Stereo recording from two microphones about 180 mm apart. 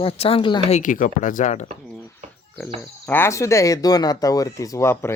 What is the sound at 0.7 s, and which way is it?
Speech, 45° left (ahead or behind).